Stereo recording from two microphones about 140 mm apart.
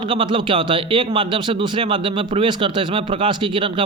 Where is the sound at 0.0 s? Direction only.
35° right (ahead or behind).